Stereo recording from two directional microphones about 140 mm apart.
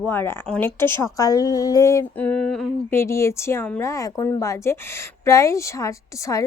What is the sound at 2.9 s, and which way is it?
A woman's voice, 20° left (ahead or behind).